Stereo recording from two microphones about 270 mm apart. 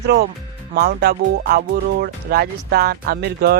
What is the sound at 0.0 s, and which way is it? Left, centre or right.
Speech, right.